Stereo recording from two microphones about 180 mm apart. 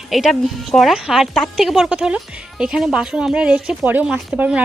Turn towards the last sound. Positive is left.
turn(degrees=-5)  # may be behind; listen again after turning